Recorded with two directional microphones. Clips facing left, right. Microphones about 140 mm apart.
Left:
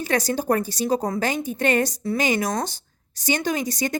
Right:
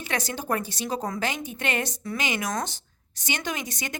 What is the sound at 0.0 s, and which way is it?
Speech, 40° left (ahead or behind).